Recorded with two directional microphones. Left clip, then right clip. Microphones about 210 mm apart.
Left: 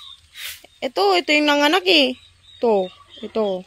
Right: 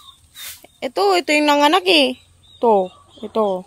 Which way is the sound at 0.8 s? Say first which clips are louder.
Right 1 dB; centre (ahead or behind).